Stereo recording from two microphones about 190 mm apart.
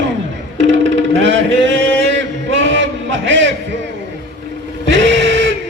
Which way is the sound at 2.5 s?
75° right (ahead or behind).